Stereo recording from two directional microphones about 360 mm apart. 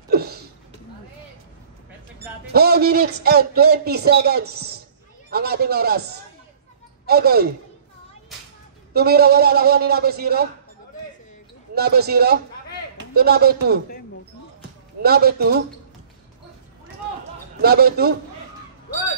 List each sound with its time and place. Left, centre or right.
0.1 s a sound: right
2.5 s a man's voice: right
8.9 s a man's voice: right
11.7 s a man's voice: right
15.0 s a man's voice: right
17.6 s a man's voice: right